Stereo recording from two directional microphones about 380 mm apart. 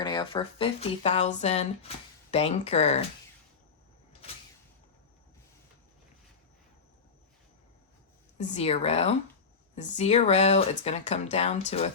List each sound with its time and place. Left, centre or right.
0.0 s speech: centre
8.4 s speech: centre